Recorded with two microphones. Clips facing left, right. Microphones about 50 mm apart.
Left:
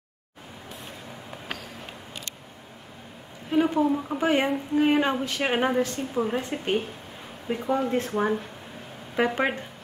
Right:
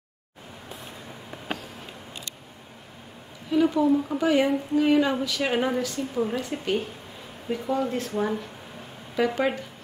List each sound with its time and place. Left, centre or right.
3.4 s a woman's voice: left